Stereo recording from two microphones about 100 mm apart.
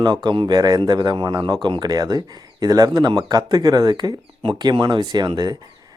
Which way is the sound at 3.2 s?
40° right (ahead or behind).